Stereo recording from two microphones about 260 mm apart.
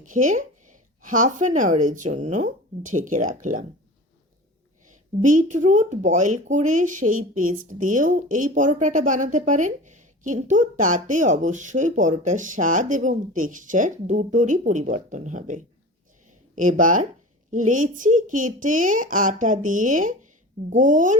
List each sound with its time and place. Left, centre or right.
0.0 s a sound: right
1.2 s speech: right
5.2 s speech: right